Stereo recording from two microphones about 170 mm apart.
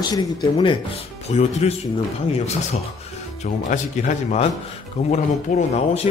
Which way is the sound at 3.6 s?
40° left (ahead or behind).